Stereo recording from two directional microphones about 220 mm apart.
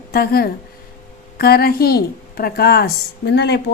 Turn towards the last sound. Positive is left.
turn(degrees=50)  # may be behind; listen again after turning